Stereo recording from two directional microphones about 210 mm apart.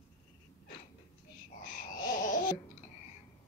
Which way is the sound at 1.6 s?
40° left (ahead or behind).